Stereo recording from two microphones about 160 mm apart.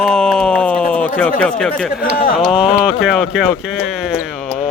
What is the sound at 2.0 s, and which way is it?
Speech, 65° left (ahead or behind).